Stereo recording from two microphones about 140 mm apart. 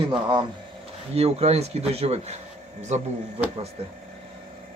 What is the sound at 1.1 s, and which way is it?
A man's voice, 50° right (ahead or behind).